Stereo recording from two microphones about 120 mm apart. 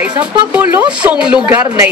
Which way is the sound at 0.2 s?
10° right (ahead or behind).